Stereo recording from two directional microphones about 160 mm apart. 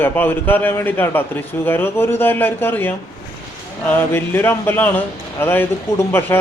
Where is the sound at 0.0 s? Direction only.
15° left (ahead or behind).